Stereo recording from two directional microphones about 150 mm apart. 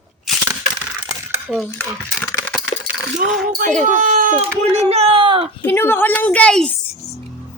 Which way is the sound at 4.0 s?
55° right (ahead or behind).